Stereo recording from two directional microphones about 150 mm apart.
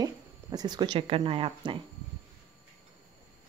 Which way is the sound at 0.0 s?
25° right (ahead or behind).